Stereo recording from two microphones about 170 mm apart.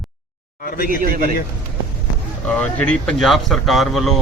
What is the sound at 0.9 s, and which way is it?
Speech, 55° right (ahead or behind).